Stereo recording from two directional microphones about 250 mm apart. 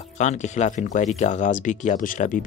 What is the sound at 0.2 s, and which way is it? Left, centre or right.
Speech, left.